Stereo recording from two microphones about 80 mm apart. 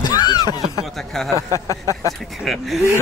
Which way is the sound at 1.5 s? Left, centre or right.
Left.